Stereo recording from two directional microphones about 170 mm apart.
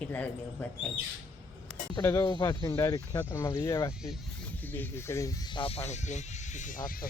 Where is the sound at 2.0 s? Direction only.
25° left (ahead or behind); by 6.8 s 45° left (ahead or behind).